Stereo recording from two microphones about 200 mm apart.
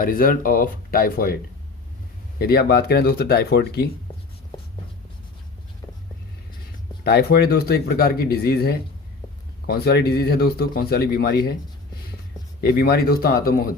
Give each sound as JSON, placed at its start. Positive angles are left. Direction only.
{"t": 0.0, "sound": "speech", "side_deg": 45}
{"t": 2.4, "sound": "speech", "side_deg": 50}
{"t": 7.0, "sound": "speech", "side_deg": 50}
{"t": 12.6, "sound": "speech", "side_deg": 50}